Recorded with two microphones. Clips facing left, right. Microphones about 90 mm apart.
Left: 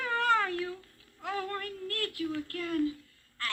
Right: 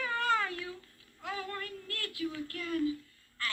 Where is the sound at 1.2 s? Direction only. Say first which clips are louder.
Left 4 dB; 45° left (ahead or behind).